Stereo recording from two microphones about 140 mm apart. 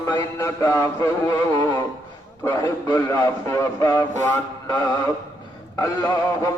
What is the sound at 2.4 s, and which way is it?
Music, 25° left (ahead or behind).